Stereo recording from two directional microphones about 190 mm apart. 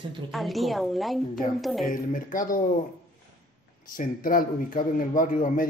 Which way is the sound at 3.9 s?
45° left (ahead or behind).